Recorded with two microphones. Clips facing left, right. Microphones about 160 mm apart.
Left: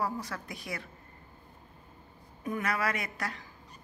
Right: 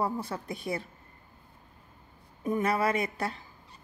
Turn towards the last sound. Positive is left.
turn(degrees=-25)  # may be behind; listen again after turning